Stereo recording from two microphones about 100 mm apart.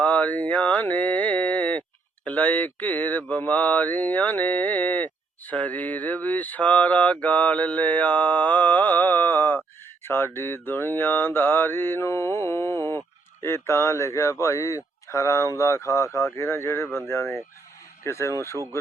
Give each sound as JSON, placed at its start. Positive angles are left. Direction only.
{"t": 0.0, "sound": "a sound", "side_deg": 15}
{"t": 2.2, "sound": "mantra", "side_deg": 15}
{"t": 10.0, "sound": "speech", "side_deg": 25}